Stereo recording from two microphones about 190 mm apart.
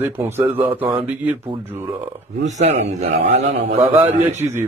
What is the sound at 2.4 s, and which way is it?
A man's voice, 35° right (ahead or behind).